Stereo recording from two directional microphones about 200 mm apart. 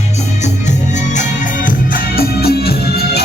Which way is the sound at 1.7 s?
45° left (ahead or behind).